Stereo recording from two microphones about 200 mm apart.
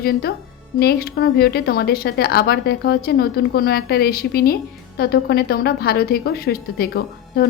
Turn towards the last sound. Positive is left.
turn(degrees=50)  # may be behind; listen again after turning